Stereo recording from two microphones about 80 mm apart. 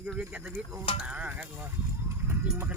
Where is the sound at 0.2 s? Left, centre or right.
Centre.